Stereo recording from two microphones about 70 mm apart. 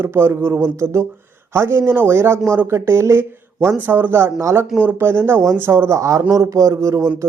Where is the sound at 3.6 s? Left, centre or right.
Right.